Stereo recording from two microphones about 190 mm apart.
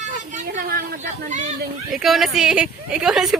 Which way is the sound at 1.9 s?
Centre (ahead or behind).